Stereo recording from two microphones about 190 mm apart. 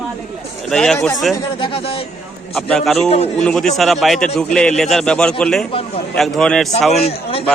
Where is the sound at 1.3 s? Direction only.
25° left (ahead or behind).